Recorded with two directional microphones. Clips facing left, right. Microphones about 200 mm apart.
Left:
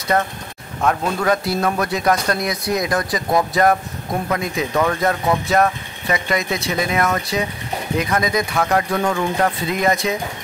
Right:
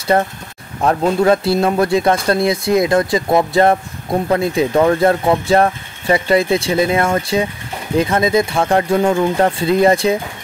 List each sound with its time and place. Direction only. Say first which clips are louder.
0.8 s speech: right 5 dB; 30° right (ahead or behind)